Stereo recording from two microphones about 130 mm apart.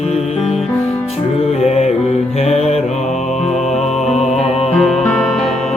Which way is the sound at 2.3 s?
55° left (ahead or behind).